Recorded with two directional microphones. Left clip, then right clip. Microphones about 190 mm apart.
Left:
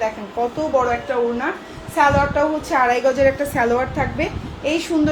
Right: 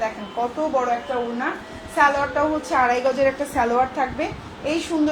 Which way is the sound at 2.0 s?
45° left (ahead or behind).